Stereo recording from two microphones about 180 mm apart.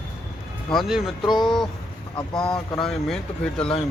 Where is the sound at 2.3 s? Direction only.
25° left (ahead or behind).